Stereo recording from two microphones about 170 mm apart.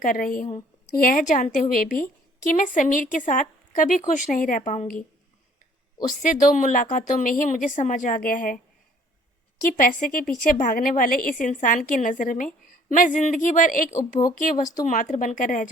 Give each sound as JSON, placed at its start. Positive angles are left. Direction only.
{"t": 0.0, "sound": "a woman's voice", "side_deg": 55}
{"t": 6.5, "sound": "a woman's voice", "side_deg": 50}
{"t": 9.6, "sound": "a woman's voice", "side_deg": 55}